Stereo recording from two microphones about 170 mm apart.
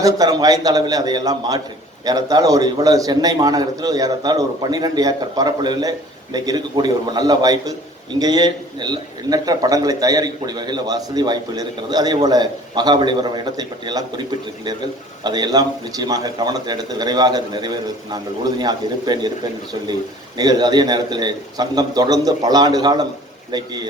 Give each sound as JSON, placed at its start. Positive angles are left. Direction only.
{"t": 0.0, "sound": "a man's voice", "side_deg": -20}